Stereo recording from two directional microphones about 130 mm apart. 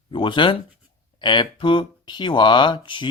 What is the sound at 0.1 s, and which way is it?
Speech, 40° left (ahead or behind).